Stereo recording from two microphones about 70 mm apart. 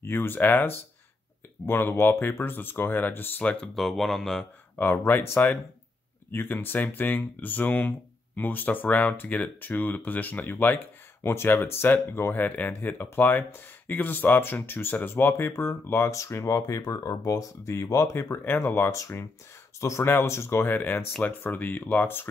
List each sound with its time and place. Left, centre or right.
0.0 s speech: left
3.6 s speech: centre
4.7 s speech: left
18.1 s speech: left